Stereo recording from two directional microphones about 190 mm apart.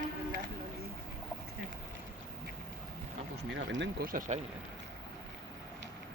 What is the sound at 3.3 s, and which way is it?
Speech, 70° right (ahead or behind).